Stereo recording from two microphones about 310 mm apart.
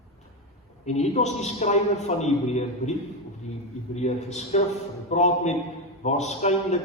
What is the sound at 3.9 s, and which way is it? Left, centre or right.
A man's voice, left.